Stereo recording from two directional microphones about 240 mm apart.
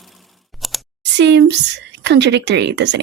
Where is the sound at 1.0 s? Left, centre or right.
Right.